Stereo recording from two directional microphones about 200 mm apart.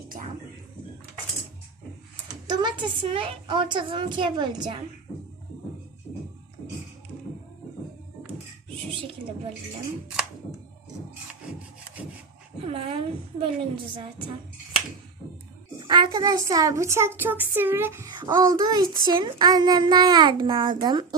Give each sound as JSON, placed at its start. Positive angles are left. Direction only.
{"t": 2.5, "sound": "a woman's voice", "side_deg": -20}
{"t": 9.0, "sound": "a sound", "side_deg": -25}
{"t": 12.6, "sound": "a woman's voice", "side_deg": -30}
{"t": 15.9, "sound": "a woman's voice", "side_deg": -20}